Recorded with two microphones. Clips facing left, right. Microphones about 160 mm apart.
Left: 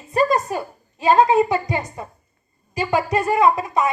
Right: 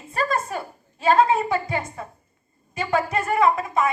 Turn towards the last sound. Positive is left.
turn(degrees=20)  # may be behind; listen again after turning